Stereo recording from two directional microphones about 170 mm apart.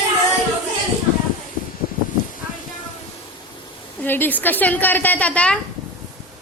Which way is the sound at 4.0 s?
10° left (ahead or behind).